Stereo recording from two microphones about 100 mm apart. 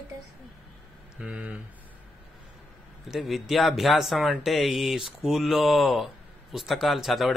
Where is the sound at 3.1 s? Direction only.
Centre (ahead or behind).